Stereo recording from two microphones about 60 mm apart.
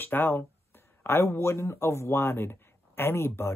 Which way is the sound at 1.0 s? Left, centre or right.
Left.